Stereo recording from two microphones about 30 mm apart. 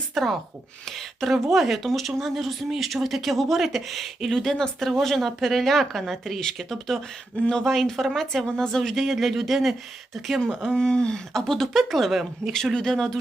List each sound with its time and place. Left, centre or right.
0.1 s speech: centre
0.9 s a sound: centre
1.3 s speech: centre
4.5 s speech: left
5.0 s speech: centre
6.4 s speech: centre
8.6 s speech: left
8.9 s speech: centre
10.8 s speech: left
11.3 s speech: centre
12.7 s speech: centre